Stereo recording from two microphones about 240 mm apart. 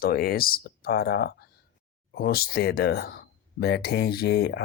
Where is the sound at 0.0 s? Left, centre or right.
Left.